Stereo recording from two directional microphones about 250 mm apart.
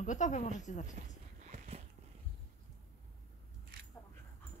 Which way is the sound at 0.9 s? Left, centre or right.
Right.